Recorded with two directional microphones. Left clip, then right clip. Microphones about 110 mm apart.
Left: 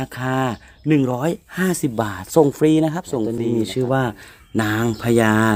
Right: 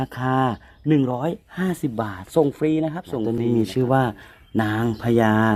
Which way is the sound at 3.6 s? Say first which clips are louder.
Even; 15° right (ahead or behind).